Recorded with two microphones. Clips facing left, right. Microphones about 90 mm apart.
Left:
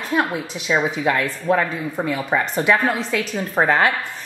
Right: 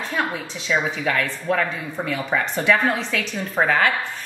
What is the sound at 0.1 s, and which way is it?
A woman's voice, 15° left (ahead or behind).